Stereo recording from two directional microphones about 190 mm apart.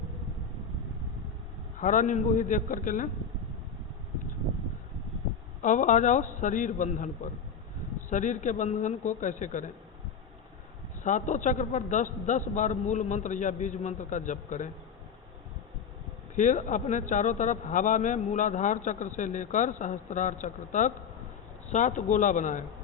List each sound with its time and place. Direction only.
1.8 s a man's voice: 40° left (ahead or behind)
5.6 s speech: 40° left (ahead or behind)
8.1 s speech: 40° left (ahead or behind)
11.0 s speech: 40° left (ahead or behind)
16.3 s speech: 40° left (ahead or behind)